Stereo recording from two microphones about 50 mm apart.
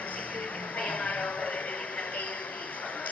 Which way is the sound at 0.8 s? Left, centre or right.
Left.